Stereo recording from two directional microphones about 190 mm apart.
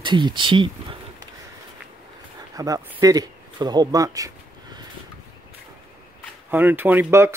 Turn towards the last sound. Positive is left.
turn(degrees=-10)  # may be behind; listen again after turning